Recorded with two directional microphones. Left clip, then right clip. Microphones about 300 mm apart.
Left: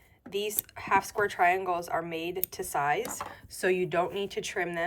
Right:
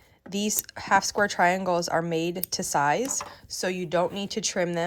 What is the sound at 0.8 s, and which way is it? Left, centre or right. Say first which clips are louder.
Speech: right 4 dB; centre.